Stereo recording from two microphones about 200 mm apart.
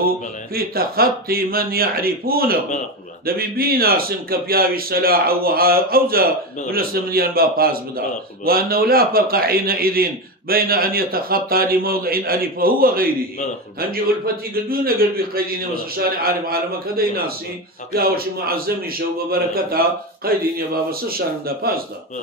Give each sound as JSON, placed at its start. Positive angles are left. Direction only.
{"t": 0.6, "sound": "a man's voice", "side_deg": -50}